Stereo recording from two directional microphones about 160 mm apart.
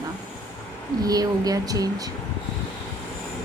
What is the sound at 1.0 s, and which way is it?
A woman's voice, 25° right (ahead or behind).